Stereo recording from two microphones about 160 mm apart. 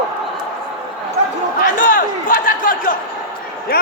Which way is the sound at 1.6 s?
60° left (ahead or behind).